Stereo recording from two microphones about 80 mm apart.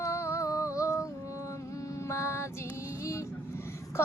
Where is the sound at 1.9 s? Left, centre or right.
Left.